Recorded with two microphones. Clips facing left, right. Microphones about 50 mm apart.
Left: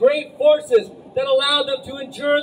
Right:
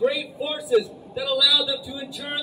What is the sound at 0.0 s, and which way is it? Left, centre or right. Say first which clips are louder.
A man's voice: left 9 dB; left.